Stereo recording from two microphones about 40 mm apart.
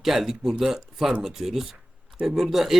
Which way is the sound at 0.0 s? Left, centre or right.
Centre.